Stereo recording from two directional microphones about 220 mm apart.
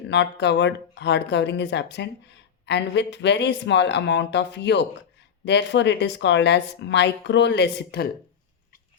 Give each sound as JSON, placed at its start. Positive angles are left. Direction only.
{"t": 0.1, "sound": "speech", "side_deg": 50}